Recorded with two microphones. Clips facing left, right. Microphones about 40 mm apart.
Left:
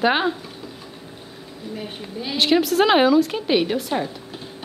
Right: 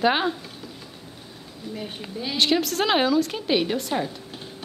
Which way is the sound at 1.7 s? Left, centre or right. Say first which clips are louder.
Left 2 dB; centre.